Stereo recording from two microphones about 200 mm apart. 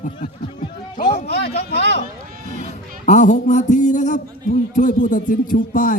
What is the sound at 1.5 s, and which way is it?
Speech, 55° left (ahead or behind).